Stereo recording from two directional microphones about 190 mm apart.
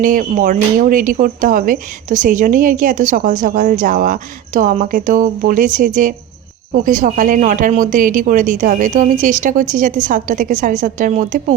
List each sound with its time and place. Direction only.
0.0 s speech: 45° right (ahead or behind)